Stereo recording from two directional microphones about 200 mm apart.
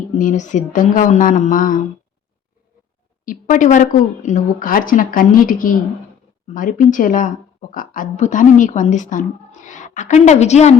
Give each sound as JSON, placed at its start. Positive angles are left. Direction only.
{"t": 0.2, "sound": "speech", "side_deg": 40}
{"t": 3.2, "sound": "speech", "side_deg": 40}